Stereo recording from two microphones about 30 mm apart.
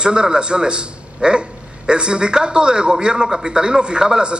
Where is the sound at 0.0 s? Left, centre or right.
Right.